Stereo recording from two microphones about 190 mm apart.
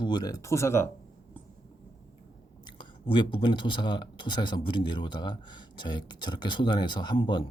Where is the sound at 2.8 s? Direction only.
25° left (ahead or behind).